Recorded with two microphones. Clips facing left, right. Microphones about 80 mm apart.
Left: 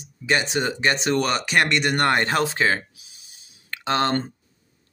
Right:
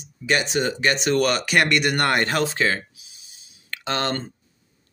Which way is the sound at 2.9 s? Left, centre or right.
Left.